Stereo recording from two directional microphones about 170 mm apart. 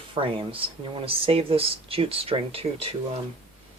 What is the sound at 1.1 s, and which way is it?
Speech, 35° right (ahead or behind).